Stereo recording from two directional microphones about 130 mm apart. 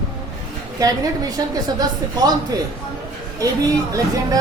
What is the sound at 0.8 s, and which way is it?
Speech, 25° right (ahead or behind).